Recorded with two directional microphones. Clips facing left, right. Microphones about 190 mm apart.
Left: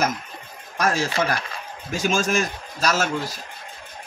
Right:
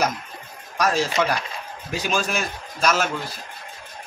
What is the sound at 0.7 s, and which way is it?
A man's voice, 45° left (ahead or behind).